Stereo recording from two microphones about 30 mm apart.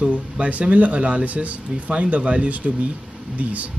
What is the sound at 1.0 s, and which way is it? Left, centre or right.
Speech, right.